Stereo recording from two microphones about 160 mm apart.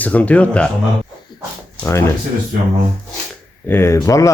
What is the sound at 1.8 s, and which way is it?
Speech, 15° left (ahead or behind).